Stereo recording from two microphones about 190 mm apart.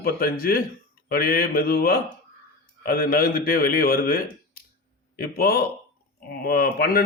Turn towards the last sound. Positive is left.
turn(degrees=50)  # may be behind; listen again after turning